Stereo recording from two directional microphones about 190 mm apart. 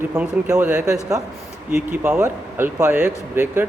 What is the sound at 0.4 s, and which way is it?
Speech, 20° right (ahead or behind).